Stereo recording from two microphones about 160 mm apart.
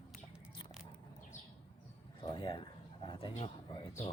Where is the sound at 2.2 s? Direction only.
30° left (ahead or behind).